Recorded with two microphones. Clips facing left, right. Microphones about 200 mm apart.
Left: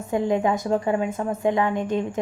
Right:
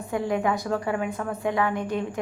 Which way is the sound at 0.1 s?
20° left (ahead or behind).